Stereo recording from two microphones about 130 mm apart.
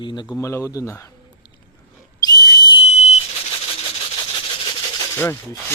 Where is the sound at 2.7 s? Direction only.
55° left (ahead or behind).